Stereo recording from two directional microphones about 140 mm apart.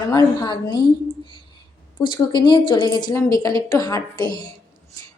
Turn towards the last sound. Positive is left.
turn(degrees=30)  # may be behind; listen again after turning